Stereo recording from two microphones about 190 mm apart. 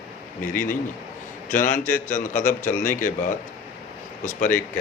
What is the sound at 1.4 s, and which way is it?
A man's voice, 45° left (ahead or behind).